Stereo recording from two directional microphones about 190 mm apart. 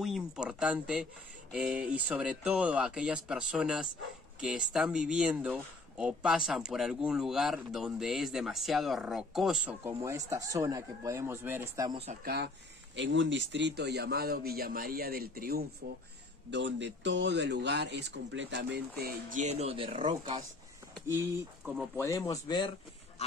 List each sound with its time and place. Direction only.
0.0 s speech: 5° right (ahead or behind)
12.9 s a man's voice: 75° right (ahead or behind); by 16.0 s 55° right (ahead or behind)
16.4 s a man's voice: 70° right (ahead or behind); by 20.4 s 25° right (ahead or behind)
21.9 s speech: 15° left (ahead or behind)